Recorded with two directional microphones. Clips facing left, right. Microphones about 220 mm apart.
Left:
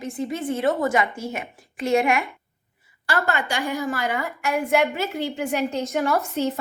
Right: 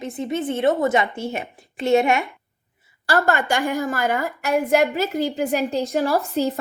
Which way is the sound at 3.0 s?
40° right (ahead or behind).